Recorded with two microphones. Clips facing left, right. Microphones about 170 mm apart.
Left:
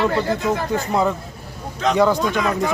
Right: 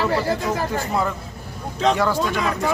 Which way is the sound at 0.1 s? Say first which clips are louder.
Left 1 dB; 5° right (ahead or behind).